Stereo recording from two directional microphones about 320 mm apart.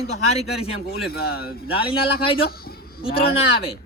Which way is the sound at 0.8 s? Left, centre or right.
Left.